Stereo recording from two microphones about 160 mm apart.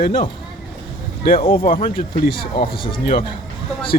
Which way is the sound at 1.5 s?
60° left (ahead or behind).